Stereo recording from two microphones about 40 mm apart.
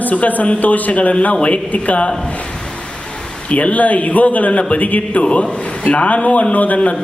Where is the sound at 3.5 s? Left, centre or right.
Left.